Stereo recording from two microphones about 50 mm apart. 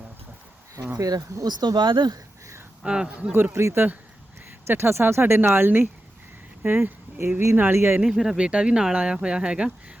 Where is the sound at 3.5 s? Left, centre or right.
Right.